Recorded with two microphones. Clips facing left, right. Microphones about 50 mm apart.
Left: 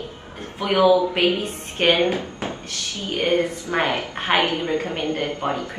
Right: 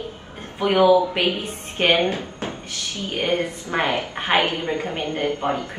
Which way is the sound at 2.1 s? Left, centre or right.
Left.